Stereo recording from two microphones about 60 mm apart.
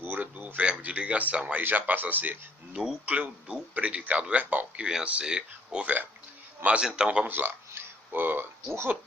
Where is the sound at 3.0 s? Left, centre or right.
Right.